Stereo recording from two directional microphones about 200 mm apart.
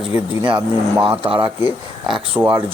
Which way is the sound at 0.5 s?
5° right (ahead or behind).